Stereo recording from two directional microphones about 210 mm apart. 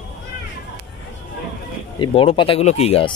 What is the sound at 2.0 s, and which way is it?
Speech, 25° left (ahead or behind).